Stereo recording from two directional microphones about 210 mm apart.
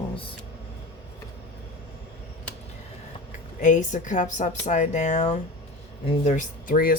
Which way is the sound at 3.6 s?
35° left (ahead or behind).